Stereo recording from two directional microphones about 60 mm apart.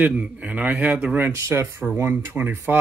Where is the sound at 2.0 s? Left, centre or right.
Right.